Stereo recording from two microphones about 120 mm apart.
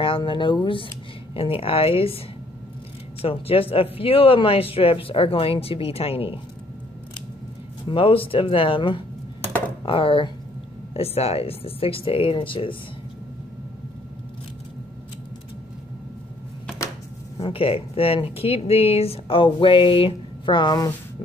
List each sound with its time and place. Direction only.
0.0 s speech: 45° left (ahead or behind)
7.9 s speech: 50° left (ahead or behind)
17.4 s speech: 50° left (ahead or behind); by 20.9 s 35° left (ahead or behind)